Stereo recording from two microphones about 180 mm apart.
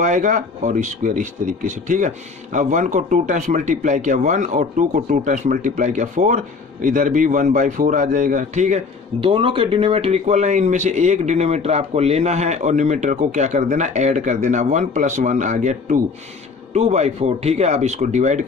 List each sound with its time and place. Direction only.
0.0 s speech: 45° right (ahead or behind)